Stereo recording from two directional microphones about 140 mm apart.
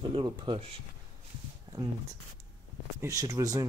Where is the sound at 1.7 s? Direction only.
30° right (ahead or behind).